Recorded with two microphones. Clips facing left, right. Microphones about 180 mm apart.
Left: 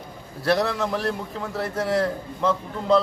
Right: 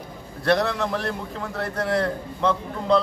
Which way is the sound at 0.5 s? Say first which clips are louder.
Right 1 dB; centre (ahead or behind).